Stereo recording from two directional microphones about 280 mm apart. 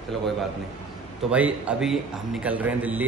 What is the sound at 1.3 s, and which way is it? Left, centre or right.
A man's voice, centre.